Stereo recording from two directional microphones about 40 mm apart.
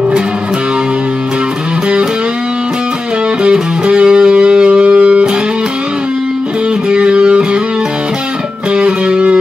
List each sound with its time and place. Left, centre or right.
3.8 s music: right
6.9 s music: right
8.7 s music: right